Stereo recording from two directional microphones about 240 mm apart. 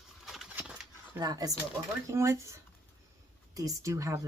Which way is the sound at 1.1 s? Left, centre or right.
Centre.